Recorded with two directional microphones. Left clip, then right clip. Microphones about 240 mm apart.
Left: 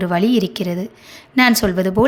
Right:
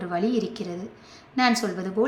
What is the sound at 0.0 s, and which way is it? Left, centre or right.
A woman's voice, left.